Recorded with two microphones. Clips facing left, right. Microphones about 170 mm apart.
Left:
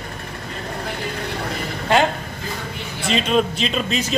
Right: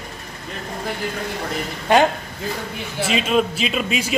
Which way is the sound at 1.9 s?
15° right (ahead or behind).